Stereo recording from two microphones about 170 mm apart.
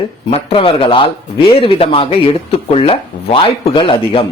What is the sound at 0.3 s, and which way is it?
Speech, 35° left (ahead or behind).